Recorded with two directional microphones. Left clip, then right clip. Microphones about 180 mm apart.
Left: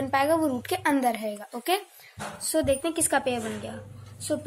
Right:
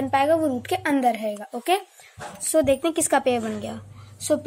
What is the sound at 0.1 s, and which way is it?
A woman's voice, 10° right (ahead or behind).